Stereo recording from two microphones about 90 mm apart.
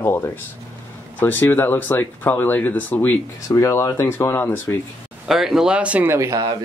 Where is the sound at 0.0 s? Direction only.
25° left (ahead or behind).